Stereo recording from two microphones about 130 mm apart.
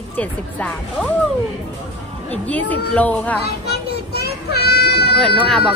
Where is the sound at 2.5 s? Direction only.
10° left (ahead or behind).